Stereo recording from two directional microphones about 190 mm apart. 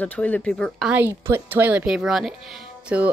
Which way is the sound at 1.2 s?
15° right (ahead or behind).